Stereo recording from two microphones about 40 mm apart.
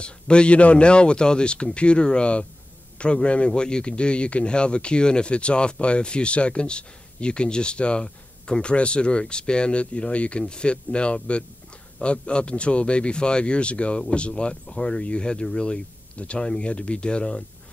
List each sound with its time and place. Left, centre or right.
0.0 s speech: left